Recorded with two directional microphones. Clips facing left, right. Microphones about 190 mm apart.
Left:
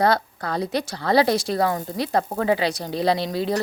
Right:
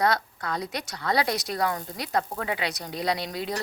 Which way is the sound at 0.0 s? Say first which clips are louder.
Left 5 dB; 30° left (ahead or behind).